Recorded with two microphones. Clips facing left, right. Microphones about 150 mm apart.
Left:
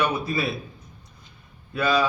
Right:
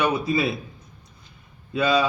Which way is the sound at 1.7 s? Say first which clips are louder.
Right 1 dB; 20° right (ahead or behind).